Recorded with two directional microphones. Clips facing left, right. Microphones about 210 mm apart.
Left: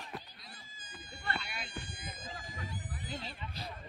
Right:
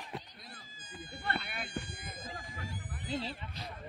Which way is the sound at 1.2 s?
55° right (ahead or behind).